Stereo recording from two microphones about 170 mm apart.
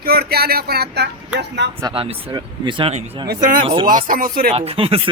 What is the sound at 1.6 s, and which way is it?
Speech, 90° right.